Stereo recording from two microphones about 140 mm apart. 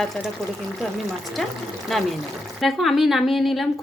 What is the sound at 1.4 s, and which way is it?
Speech, centre (ahead or behind).